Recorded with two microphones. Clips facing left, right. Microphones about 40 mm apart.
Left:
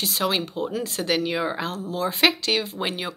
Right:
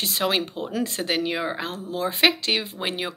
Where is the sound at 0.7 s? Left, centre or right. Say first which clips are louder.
Right 1 dB; right.